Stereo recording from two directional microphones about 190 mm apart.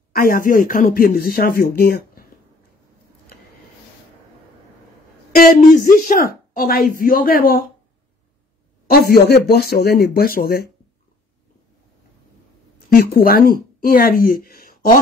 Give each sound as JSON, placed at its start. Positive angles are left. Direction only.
{"t": 0.1, "sound": "speech", "side_deg": 50}
{"t": 5.9, "sound": "speech", "side_deg": 45}
{"t": 8.9, "sound": "speech", "side_deg": 55}
{"t": 12.9, "sound": "speech", "side_deg": 50}